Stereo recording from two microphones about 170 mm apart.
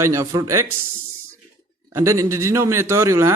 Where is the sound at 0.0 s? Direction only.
15° right (ahead or behind).